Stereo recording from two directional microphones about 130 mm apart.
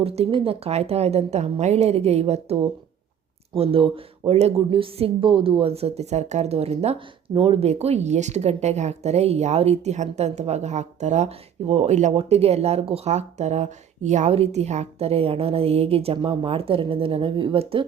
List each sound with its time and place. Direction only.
0.0 s a woman's voice: 45° right (ahead or behind); by 12.1 s 65° right (ahead or behind)
12.1 s speech: 50° right (ahead or behind)